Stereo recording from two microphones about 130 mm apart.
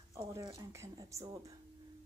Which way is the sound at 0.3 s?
30° right (ahead or behind).